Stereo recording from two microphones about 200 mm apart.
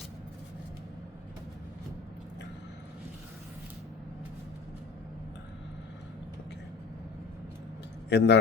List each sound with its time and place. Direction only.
8.1 s a man's voice: 60° left (ahead or behind)